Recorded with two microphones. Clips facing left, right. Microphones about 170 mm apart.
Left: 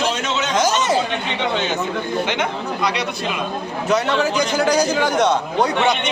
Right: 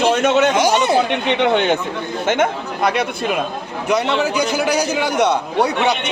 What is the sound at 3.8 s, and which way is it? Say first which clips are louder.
A man's voice: right 1 dB; 10° right (ahead or behind).